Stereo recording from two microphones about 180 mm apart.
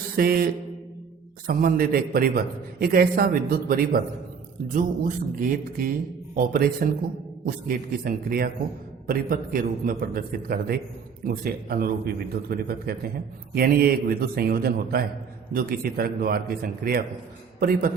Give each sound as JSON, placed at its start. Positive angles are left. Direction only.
{"t": 0.2, "sound": "a man's voice", "side_deg": -55}
{"t": 1.5, "sound": "a man's voice", "side_deg": -55}